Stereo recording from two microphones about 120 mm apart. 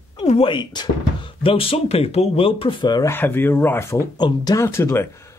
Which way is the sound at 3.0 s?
20° left (ahead or behind).